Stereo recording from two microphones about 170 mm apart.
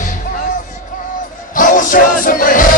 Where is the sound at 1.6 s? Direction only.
50° left (ahead or behind).